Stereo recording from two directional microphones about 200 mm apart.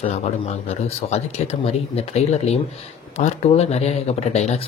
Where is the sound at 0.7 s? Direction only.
30° left (ahead or behind).